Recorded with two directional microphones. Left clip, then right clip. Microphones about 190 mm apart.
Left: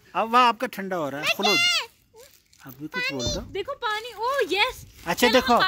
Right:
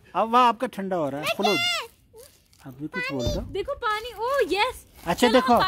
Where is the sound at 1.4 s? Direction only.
30° right (ahead or behind).